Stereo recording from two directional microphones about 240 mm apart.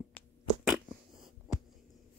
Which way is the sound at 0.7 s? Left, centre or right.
Centre.